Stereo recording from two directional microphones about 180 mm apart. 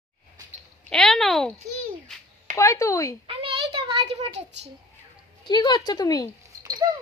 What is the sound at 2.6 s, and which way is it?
Speech, 15° left (ahead or behind).